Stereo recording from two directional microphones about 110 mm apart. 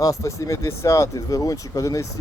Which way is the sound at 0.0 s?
30° left (ahead or behind).